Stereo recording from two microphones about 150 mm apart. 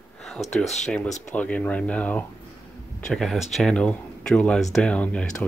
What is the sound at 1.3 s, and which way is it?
Speech, 10° left (ahead or behind).